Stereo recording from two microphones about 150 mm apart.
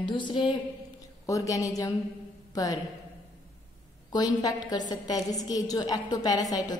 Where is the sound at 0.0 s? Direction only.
30° left (ahead or behind).